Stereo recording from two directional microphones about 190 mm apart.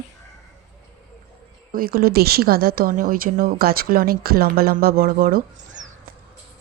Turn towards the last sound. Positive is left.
turn(degrees=-50)  # may be behind; listen again after turning